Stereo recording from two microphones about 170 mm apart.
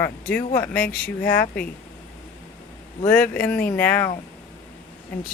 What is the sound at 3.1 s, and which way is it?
Speech, 10° left (ahead or behind).